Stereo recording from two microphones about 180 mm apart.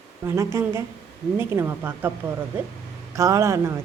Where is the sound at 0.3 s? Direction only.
15° right (ahead or behind).